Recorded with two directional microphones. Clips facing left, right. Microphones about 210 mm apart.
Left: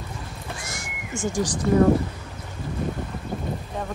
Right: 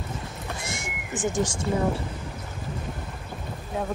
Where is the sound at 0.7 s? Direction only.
20° right (ahead or behind).